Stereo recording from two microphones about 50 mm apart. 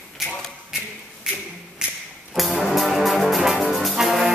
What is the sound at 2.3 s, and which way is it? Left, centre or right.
Brass instrument, centre.